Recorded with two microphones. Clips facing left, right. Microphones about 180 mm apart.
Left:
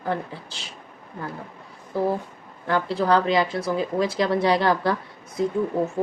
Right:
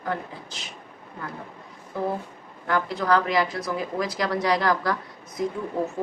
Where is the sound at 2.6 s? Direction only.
30° left (ahead or behind).